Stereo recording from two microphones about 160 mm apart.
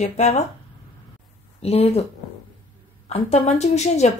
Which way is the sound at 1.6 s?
40° left (ahead or behind).